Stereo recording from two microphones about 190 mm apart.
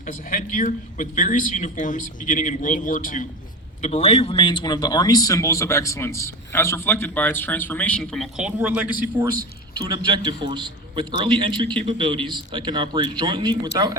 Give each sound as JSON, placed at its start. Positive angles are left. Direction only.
{"t": 0.1, "sound": "a man's voice", "side_deg": 45}
{"t": 3.8, "sound": "speech", "side_deg": 35}
{"t": 9.4, "sound": "a man's voice", "side_deg": -20}